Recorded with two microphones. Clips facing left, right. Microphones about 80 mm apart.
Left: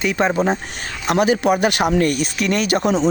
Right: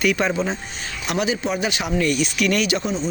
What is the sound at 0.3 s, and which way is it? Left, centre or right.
Speech, left.